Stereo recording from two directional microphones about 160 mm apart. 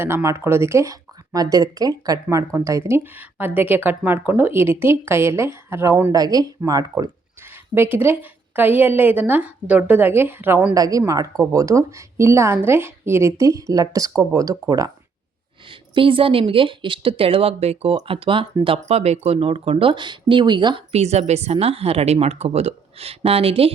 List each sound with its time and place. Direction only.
0.0 s speech: 15° right (ahead or behind)
7.4 s speech: 15° right (ahead or behind)
10.8 s a woman's voice: 20° right (ahead or behind)
15.7 s a woman's voice: 30° right (ahead or behind)
20.9 s a woman's voice: 40° right (ahead or behind)